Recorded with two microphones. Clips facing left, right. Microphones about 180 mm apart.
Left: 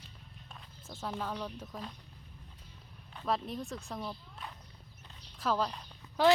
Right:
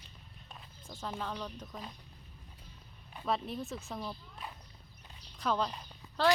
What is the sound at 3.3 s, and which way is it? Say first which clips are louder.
A woman's voice: even; centre (ahead or behind).